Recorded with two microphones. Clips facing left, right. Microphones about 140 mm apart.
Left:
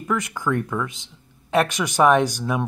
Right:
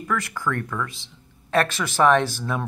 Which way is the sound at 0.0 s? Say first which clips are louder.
Left 2 dB; 20° left (ahead or behind).